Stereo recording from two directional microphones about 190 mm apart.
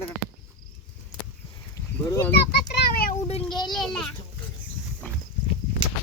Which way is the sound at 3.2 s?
30° left (ahead or behind).